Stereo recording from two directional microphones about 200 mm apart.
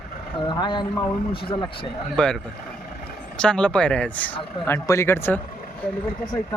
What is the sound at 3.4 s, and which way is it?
Speech, 5° left (ahead or behind).